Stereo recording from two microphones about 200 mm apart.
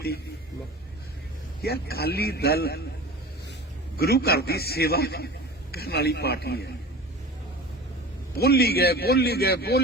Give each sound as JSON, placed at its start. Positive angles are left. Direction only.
{"t": 1.6, "sound": "a man's voice", "side_deg": 50}
{"t": 3.9, "sound": "a man's voice", "side_deg": 50}
{"t": 8.4, "sound": "a man's voice", "side_deg": 50}